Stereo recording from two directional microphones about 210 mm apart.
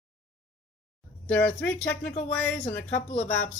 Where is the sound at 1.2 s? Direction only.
10° left (ahead or behind).